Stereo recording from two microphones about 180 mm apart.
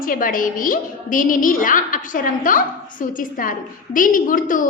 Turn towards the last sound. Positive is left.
turn(degrees=50)  # may be behind; listen again after turning